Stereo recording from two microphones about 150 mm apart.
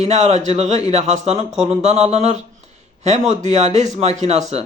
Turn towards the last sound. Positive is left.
turn(degrees=-50)  # may be behind; listen again after turning